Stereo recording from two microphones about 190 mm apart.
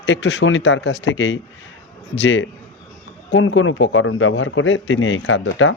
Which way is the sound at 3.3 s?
90° left.